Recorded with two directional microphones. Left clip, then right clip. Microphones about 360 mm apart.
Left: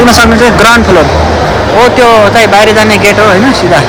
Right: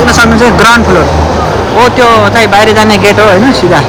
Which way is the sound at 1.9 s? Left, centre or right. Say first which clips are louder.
Left 1 dB; centre.